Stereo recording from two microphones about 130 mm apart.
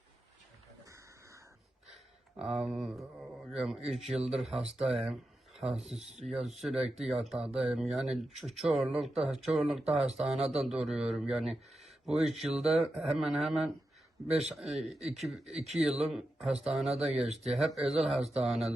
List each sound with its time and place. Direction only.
0.9 s a sound: 25° right (ahead or behind)
2.3 s speech: 5° right (ahead or behind)
14.3 s speech: 55° right (ahead or behind)
14.5 s speech: centre (ahead or behind)